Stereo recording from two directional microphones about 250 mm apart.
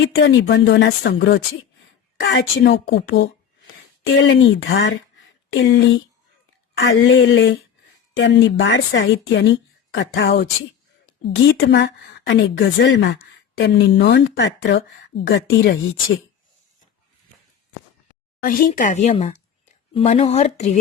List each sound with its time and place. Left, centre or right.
0.0 s speech: left
18.4 s speech: left